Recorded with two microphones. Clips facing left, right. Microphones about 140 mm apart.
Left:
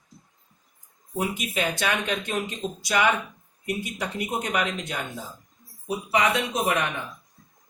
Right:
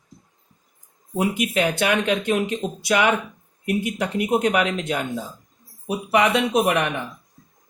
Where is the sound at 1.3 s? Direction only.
65° right (ahead or behind).